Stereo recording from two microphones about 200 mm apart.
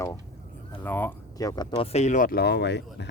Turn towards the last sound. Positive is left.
turn(degrees=60)  # may be behind; listen again after turning